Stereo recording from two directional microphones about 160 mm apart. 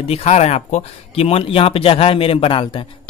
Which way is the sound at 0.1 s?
45° left (ahead or behind).